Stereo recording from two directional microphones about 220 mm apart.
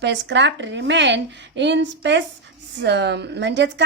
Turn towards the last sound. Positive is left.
turn(degrees=-50)  # may be behind; listen again after turning